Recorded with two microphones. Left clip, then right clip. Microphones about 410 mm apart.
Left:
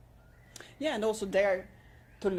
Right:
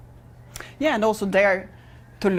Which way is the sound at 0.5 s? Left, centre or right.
Right.